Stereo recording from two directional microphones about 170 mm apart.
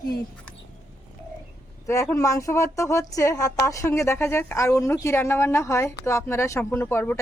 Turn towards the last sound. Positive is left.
turn(degrees=15)  # may be behind; listen again after turning